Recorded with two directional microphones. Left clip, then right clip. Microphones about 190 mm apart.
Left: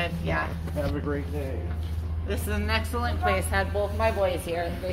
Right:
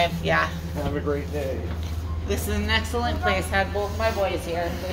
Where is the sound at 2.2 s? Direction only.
10° left (ahead or behind).